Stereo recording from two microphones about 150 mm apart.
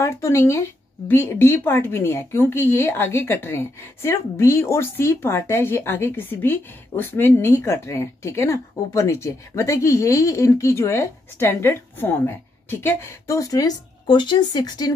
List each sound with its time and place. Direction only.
0.0 s speech: 20° left (ahead or behind)